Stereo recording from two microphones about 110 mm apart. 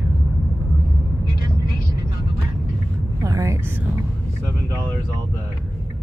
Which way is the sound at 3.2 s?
30° right (ahead or behind).